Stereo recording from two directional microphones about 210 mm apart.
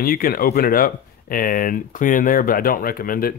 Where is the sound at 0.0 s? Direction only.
45° left (ahead or behind).